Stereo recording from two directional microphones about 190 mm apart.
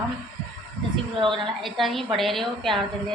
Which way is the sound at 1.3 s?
Centre (ahead or behind).